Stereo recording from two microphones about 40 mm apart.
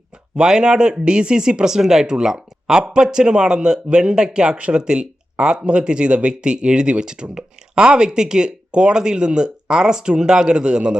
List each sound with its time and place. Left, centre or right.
0.3 s speech: right